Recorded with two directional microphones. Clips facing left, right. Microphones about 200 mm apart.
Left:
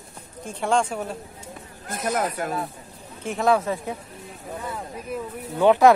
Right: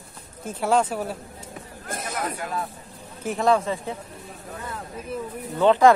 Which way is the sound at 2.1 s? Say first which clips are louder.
Left 5 dB; 50° left (ahead or behind).